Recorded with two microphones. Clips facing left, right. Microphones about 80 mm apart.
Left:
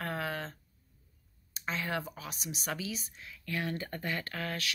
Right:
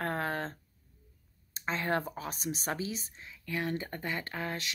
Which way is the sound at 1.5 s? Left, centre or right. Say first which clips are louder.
Right 3 dB; right.